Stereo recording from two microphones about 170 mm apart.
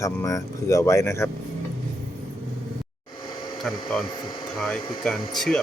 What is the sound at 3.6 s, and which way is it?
Speech, centre (ahead or behind).